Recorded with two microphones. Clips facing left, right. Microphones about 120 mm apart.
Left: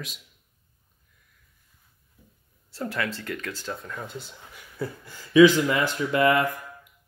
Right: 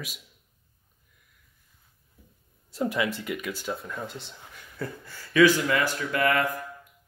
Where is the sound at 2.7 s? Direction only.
15° right (ahead or behind); by 4.4 s centre (ahead or behind).